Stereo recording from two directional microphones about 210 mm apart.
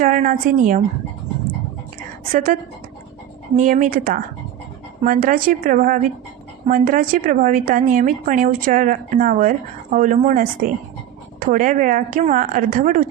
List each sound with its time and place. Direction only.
0.0 s a woman's voice: 40° right (ahead or behind)
2.3 s a woman's voice: 40° right (ahead or behind)
3.6 s a woman's voice: 40° right (ahead or behind)